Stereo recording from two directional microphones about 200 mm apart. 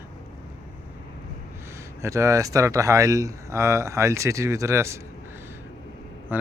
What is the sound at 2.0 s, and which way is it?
Speech, 15° right (ahead or behind).